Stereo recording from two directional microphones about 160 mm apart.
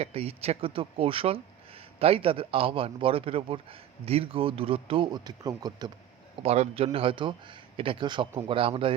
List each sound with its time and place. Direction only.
0.0 s a man's voice: 40° right (ahead or behind)
6.4 s a man's voice: 40° right (ahead or behind)